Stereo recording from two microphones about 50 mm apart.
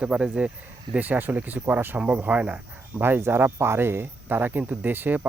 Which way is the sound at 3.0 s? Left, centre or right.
Right.